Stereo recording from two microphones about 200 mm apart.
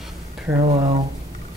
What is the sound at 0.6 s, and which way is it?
Speech, 35° right (ahead or behind).